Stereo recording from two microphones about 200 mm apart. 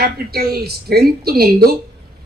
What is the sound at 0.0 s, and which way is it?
Speech, 50° right (ahead or behind).